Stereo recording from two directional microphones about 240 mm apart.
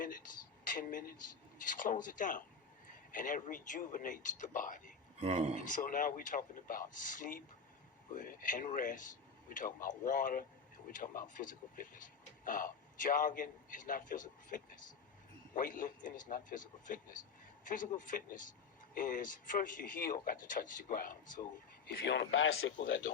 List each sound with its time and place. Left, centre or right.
0.6 s speech: left
1.1 s speech: left
1.7 s speech: left
5.2 s speech: right
5.5 s speech: left
21.8 s speech: left